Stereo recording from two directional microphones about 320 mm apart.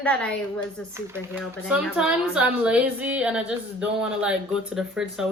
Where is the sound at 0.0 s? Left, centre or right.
Centre.